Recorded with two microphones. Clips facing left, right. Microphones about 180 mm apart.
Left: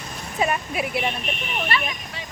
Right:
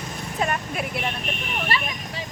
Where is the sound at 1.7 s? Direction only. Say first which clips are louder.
Left 2 dB; 35° right (ahead or behind).